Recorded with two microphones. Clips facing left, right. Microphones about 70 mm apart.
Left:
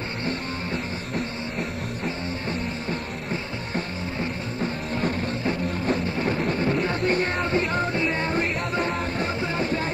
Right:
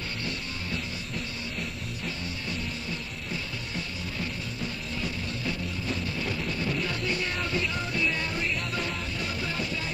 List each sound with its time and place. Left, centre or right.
0.2 s music: left
2.0 s music: left